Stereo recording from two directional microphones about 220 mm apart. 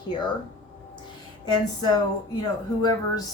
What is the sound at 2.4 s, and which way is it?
Speech, 20° left (ahead or behind).